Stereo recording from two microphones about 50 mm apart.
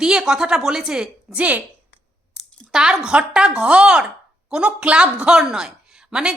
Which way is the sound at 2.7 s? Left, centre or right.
Centre.